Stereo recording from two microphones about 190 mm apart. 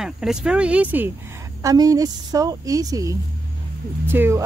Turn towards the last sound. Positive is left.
turn(degrees=-10)  # may be behind; listen again after turning